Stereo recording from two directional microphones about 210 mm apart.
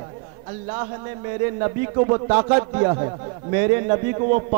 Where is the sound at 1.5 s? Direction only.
25° right (ahead or behind).